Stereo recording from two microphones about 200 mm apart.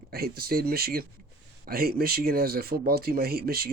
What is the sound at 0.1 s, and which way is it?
Speech, 50° right (ahead or behind).